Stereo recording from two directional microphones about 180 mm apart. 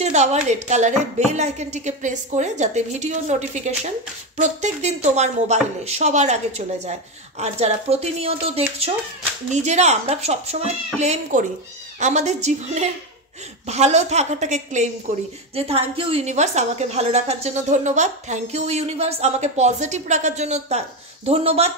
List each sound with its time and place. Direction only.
0.0 s a woman's voice: 40° right (ahead or behind)